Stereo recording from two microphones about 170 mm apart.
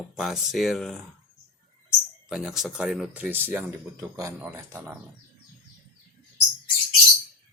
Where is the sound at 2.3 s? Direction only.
Centre (ahead or behind).